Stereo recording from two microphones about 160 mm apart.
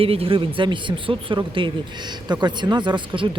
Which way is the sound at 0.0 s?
35° right (ahead or behind).